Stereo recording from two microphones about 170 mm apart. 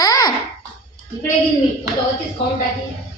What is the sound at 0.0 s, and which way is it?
Babbling, 20° left (ahead or behind).